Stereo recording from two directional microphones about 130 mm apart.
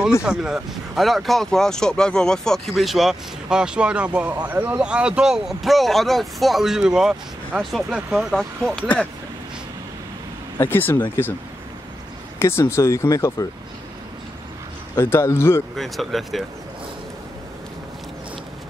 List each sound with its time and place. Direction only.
0.2 s speech: 5° right (ahead or behind)
10.6 s speech: 15° left (ahead or behind)
12.4 s speech: 20° left (ahead or behind)
15.0 s speech: 20° left (ahead or behind)
15.7 s speech: centre (ahead or behind)